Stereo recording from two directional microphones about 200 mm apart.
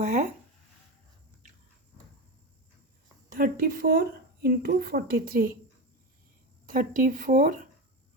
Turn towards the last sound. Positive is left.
turn(degrees=-45)  # may be behind; listen again after turning